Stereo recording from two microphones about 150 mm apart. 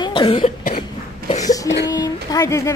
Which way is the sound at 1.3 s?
50° left (ahead or behind).